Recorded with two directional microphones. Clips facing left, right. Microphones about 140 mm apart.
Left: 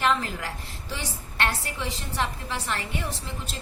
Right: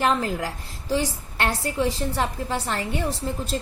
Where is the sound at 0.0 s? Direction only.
40° right (ahead or behind).